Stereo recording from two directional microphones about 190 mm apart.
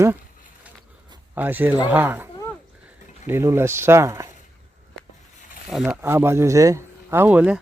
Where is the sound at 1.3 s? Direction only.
10° right (ahead or behind).